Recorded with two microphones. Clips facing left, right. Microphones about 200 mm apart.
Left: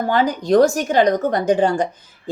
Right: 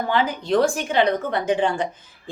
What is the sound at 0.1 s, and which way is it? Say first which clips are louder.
Speech: left 5 dB; 40° left (ahead or behind).